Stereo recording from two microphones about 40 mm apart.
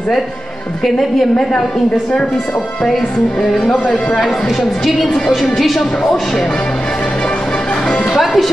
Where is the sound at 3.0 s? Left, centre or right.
Left.